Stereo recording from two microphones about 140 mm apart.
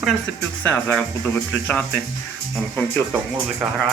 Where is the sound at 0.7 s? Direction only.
10° left (ahead or behind).